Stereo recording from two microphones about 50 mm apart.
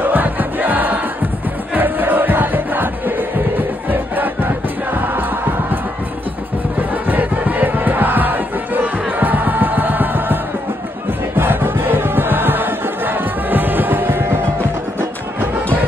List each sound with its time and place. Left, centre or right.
0.0 s music: right
6.8 s music: right